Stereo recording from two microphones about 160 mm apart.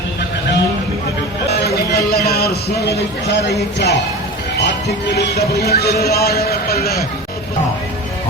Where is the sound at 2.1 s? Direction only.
80° left.